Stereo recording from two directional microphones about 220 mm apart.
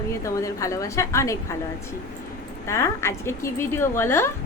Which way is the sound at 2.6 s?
10° left (ahead or behind).